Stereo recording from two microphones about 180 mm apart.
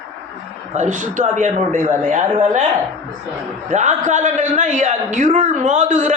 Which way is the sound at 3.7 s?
40° right (ahead or behind).